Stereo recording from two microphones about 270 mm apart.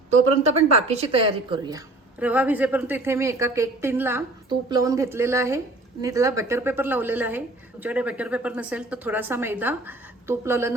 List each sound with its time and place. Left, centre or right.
0.9 s a woman's voice: right
2.1 s a woman's voice: centre